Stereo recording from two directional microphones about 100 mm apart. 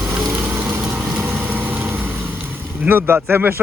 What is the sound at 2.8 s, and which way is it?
Speech, 20° right (ahead or behind).